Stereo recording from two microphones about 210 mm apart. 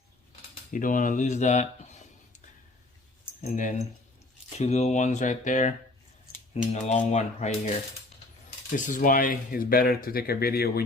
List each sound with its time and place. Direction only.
0.7 s speech: 40° left (ahead or behind)
3.4 s speech: 35° left (ahead or behind)
6.8 s speech: 30° left (ahead or behind)